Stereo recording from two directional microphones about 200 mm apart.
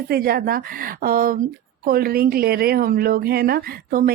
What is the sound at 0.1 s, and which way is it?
A woman's voice, 50° right (ahead or behind).